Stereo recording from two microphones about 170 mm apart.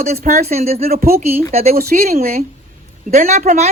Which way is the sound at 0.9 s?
60° right (ahead or behind).